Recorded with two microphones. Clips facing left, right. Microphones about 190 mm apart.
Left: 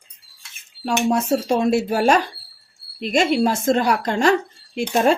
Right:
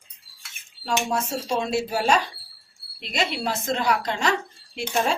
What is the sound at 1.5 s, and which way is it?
Speech, 55° left (ahead or behind).